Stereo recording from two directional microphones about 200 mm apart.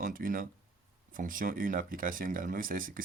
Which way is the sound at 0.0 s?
45° right (ahead or behind).